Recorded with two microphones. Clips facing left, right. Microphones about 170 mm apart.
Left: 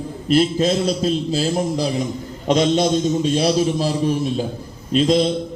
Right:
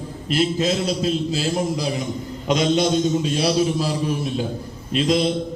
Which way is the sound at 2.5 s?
35° left (ahead or behind).